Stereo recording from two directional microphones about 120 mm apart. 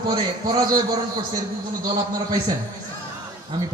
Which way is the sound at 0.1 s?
35° right (ahead or behind).